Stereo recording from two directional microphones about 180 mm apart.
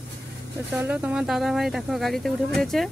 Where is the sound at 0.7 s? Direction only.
10° right (ahead or behind).